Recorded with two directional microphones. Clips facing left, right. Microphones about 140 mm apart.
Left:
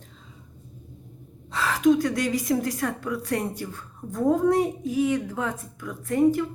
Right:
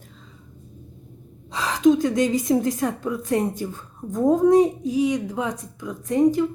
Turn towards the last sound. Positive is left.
turn(degrees=-20)  # may be behind; listen again after turning